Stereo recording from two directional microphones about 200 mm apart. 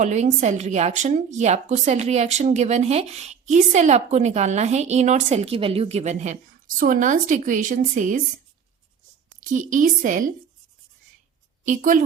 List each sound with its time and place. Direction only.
0.0 s a woman's voice: 35° right (ahead or behind)
9.4 s a woman's voice: 40° right (ahead or behind)
11.6 s a woman's voice: 40° right (ahead or behind)